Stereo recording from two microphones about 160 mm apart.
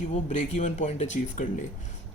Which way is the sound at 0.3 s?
45° left (ahead or behind).